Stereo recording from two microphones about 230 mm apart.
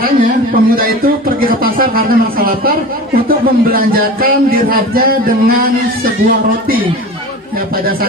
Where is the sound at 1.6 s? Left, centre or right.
Right.